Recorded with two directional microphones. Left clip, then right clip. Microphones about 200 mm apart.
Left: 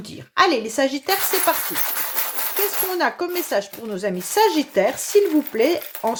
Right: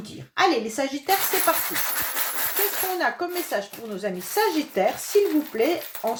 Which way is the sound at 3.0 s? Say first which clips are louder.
Left 5 dB; 45° left (ahead or behind).